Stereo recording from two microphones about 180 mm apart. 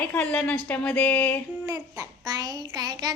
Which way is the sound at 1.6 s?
20° right (ahead or behind).